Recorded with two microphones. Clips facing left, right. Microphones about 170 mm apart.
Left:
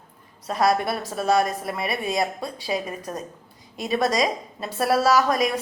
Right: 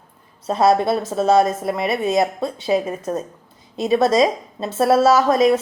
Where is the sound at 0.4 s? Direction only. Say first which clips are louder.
Right 6 dB; 25° right (ahead or behind).